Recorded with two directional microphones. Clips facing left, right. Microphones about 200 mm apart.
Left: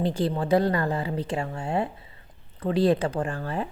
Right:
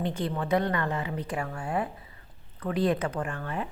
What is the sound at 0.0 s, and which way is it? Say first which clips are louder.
A woman's voice: left 5 dB; 35° left (ahead or behind).